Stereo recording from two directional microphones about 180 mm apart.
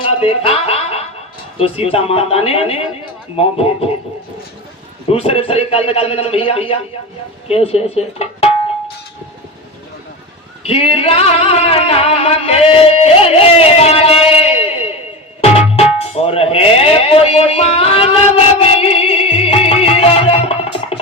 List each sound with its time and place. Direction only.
0.0 s music: 30° left (ahead or behind)
1.5 s a man's voice: 35° left (ahead or behind)
5.0 s a man's voice: 30° left (ahead or behind)
10.6 s speech: 35° left (ahead or behind)
10.9 s music: 35° left (ahead or behind)